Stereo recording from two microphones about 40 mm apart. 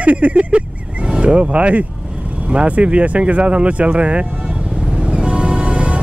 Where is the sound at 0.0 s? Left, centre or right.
Right.